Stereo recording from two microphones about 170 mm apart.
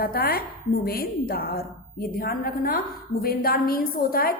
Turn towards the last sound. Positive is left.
turn(degrees=60)  # may be behind; listen again after turning